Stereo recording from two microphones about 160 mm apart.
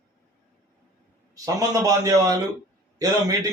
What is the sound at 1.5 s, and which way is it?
A man's voice, 20° right (ahead or behind).